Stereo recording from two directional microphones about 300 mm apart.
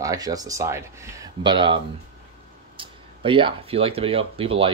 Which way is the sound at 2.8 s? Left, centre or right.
Centre.